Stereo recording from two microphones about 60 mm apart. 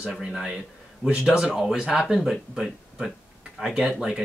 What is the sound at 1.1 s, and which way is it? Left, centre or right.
Speech, centre.